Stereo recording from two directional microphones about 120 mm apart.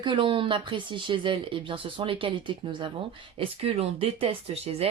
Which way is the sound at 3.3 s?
50° right (ahead or behind).